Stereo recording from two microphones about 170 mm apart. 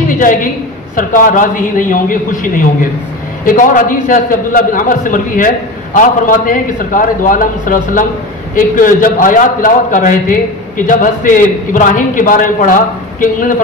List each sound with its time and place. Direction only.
0.2 s a woman's voice: 50° left (ahead or behind)
3.4 s a man's voice: 50° left (ahead or behind)